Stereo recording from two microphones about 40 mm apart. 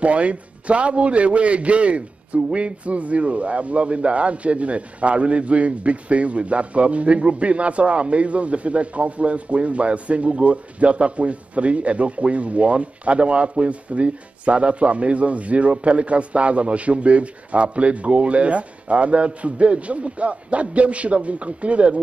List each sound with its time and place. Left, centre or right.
0.0 s a man's voice: right